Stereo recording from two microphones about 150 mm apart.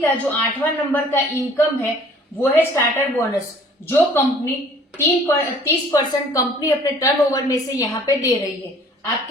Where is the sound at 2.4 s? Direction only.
15° left (ahead or behind).